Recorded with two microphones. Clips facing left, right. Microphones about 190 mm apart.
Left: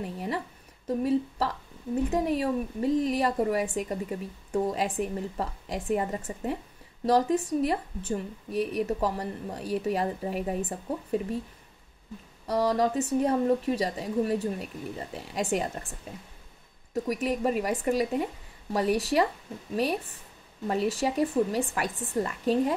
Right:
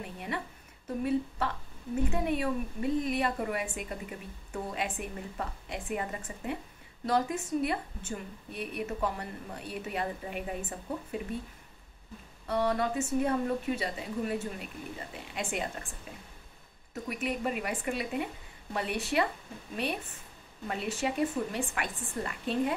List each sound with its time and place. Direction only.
0.0 s a woman's voice: 40° left (ahead or behind)
1.4 s a woman's voice: 35° left (ahead or behind)
12.4 s a woman's voice: 35° left (ahead or behind)
16.9 s a woman's voice: 35° left (ahead or behind)